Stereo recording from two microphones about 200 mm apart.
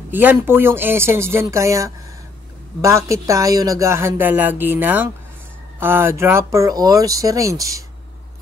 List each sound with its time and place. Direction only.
0.1 s speech: 10° right (ahead or behind)